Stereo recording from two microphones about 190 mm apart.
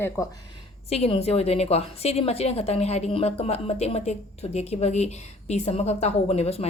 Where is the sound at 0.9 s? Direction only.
30° left (ahead or behind).